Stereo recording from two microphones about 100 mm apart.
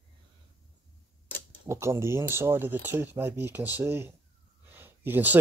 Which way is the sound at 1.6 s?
25° right (ahead or behind).